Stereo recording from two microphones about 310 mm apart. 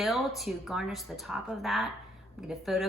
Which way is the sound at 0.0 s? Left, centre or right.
Centre.